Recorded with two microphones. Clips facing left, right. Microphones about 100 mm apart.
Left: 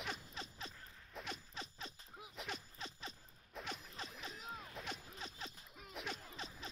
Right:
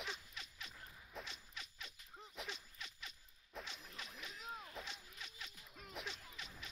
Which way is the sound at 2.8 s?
35° left (ahead or behind).